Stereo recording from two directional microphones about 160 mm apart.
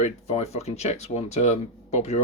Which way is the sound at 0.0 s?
45° left (ahead or behind).